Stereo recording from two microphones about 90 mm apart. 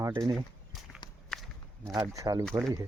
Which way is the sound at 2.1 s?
40° right (ahead or behind).